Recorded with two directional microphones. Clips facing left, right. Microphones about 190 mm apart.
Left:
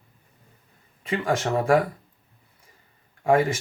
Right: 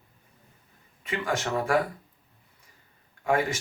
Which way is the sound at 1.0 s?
30° left (ahead or behind).